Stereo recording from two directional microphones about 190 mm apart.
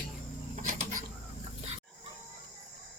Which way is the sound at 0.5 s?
45° right (ahead or behind).